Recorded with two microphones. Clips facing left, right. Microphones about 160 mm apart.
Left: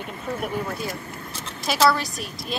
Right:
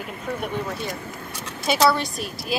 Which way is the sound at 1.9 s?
Centre (ahead or behind).